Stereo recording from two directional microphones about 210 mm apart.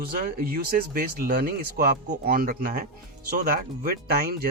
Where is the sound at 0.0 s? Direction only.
45° right (ahead or behind).